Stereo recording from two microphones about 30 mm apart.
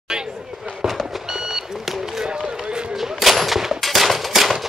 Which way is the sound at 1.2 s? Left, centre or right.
Centre.